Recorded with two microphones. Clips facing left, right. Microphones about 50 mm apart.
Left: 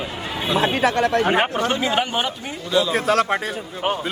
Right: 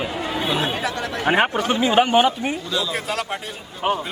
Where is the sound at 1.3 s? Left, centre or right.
Centre.